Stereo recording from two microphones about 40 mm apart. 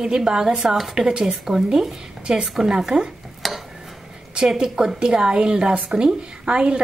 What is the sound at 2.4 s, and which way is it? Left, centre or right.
Speech, centre.